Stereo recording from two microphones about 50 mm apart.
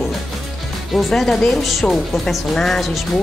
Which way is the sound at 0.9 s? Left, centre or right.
Centre.